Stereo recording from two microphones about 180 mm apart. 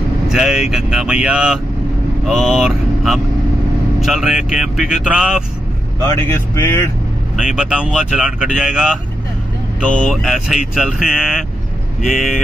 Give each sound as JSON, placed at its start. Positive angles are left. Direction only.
{"t": 0.3, "sound": "speech", "side_deg": 0}
{"t": 6.0, "sound": "speech", "side_deg": 15}
{"t": 7.4, "sound": "speech", "side_deg": -5}